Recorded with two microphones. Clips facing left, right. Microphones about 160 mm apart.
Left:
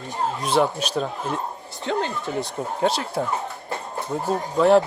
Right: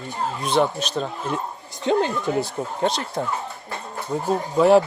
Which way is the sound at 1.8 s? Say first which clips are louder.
Right 5 dB; 15° right (ahead or behind).